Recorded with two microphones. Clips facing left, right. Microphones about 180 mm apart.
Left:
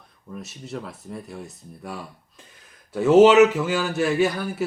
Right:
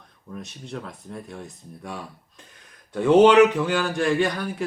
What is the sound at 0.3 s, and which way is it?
Speech, 5° left (ahead or behind).